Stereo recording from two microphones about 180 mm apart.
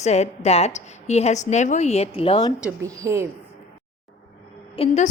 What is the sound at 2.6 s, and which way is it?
Speech, 10° right (ahead or behind).